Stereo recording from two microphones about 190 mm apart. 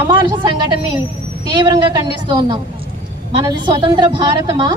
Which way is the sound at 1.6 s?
20° right (ahead or behind).